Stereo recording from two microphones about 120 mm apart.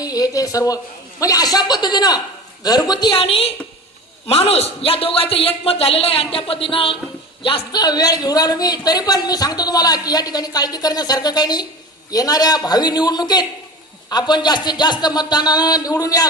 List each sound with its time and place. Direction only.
0.0 s a man's voice: 30° left (ahead or behind)
3.2 s a man's voice: 50° left (ahead or behind)
7.8 s a man's voice: 35° left (ahead or behind)